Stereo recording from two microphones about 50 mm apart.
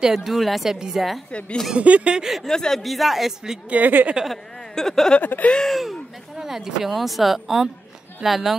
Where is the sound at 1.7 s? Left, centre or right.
Right.